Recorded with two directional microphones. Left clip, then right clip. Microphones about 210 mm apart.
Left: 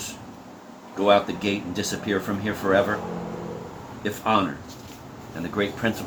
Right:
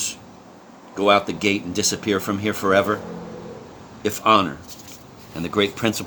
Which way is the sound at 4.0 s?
50° right (ahead or behind).